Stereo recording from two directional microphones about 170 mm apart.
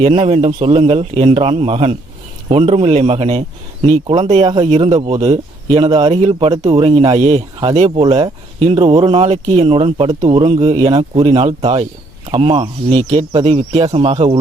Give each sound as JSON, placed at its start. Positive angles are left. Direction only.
{"t": 0.0, "sound": "speech", "side_deg": -35}